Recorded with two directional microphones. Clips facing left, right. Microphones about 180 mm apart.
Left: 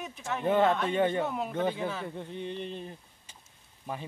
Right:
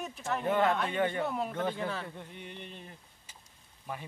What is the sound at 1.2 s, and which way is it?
Speech, centre (ahead or behind).